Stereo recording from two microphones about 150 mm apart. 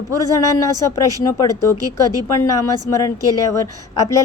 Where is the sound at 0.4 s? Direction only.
20° left (ahead or behind).